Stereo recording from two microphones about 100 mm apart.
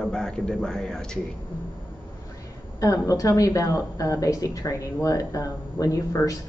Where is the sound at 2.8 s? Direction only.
35° left (ahead or behind).